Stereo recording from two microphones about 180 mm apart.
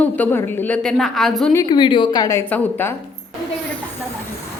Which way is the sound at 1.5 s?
25° left (ahead or behind).